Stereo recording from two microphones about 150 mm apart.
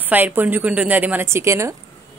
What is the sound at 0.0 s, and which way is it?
A woman's voice, 10° right (ahead or behind).